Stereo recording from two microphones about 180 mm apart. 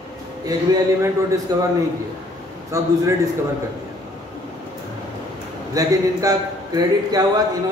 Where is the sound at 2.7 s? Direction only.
15° right (ahead or behind).